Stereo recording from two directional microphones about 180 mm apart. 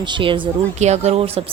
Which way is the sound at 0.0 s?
25° right (ahead or behind).